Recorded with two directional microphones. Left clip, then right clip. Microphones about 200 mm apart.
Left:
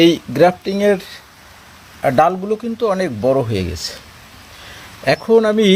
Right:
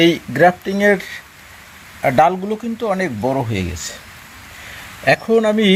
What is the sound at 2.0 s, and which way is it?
Speech, 5° left (ahead or behind).